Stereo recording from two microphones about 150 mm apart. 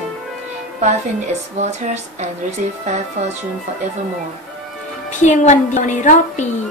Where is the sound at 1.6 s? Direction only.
50° right (ahead or behind).